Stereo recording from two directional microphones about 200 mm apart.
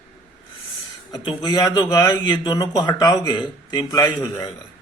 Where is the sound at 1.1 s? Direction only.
20° left (ahead or behind).